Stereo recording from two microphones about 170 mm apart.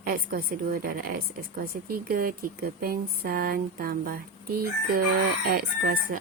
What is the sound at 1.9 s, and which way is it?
Speech, 60° right (ahead or behind).